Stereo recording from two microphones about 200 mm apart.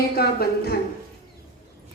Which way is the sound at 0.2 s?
50° left (ahead or behind).